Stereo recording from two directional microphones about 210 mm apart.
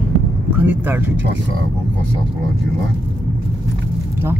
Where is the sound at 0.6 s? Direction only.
10° right (ahead or behind).